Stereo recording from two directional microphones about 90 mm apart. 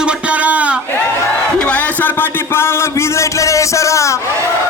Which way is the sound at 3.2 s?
35° left (ahead or behind).